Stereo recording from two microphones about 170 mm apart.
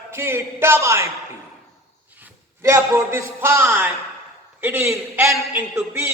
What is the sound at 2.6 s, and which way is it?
Speech, 15° right (ahead or behind).